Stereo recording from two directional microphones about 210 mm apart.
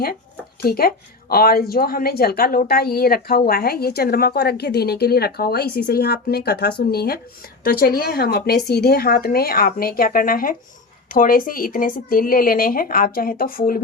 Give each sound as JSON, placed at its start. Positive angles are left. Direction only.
{"t": 0.6, "sound": "a woman's voice", "side_deg": 45}